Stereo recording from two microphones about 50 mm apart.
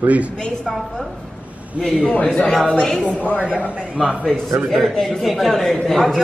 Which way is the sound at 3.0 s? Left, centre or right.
Left.